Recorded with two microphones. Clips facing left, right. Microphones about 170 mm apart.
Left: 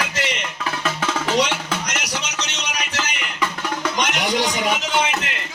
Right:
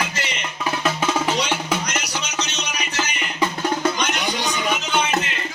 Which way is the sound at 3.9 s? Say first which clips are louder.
Left 3 dB; 90° left.